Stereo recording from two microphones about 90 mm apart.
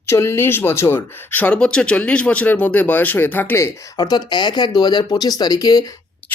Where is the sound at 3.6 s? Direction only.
45° left (ahead or behind).